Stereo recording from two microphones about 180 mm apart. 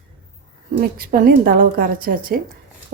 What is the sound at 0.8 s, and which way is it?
A woman's voice, 55° right (ahead or behind).